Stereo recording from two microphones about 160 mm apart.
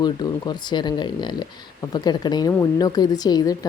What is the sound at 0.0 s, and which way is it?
Speech, 25° left (ahead or behind).